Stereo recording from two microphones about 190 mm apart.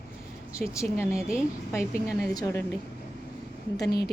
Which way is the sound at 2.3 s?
20° left (ahead or behind).